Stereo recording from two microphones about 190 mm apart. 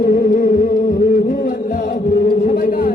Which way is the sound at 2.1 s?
55° left (ahead or behind).